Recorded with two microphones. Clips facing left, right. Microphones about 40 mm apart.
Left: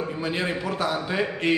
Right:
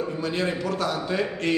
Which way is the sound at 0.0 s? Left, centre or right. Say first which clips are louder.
Right 1 dB; centre.